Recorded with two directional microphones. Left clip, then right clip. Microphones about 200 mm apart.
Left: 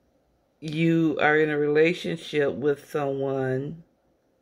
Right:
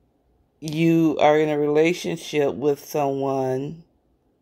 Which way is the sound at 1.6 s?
10° right (ahead or behind).